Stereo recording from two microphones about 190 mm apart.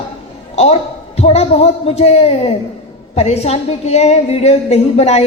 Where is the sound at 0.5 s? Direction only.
35° left (ahead or behind).